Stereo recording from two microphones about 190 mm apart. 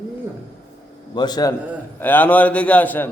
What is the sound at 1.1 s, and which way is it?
Speech, 20° left (ahead or behind).